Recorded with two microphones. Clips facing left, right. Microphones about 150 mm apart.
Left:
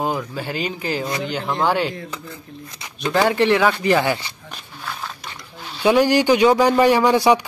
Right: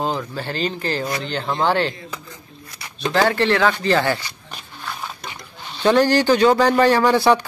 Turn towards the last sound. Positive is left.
turn(degrees=15)  # may be behind; listen again after turning